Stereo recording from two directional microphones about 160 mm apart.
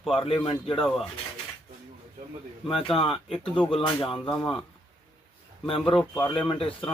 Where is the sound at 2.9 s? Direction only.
35° left (ahead or behind).